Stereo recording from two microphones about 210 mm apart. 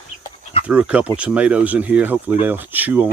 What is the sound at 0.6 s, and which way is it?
Speech, 5° right (ahead or behind).